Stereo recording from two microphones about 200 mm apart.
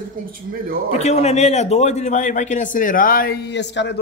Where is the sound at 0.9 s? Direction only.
35° left (ahead or behind).